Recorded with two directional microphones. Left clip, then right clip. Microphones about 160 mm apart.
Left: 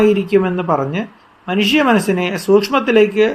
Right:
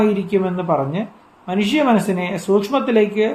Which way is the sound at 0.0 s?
20° left (ahead or behind).